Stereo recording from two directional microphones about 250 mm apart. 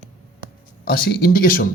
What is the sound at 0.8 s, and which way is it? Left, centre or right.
Speech, left.